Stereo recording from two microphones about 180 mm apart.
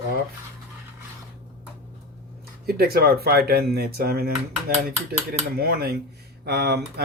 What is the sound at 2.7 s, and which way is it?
Speech, 55° right (ahead or behind).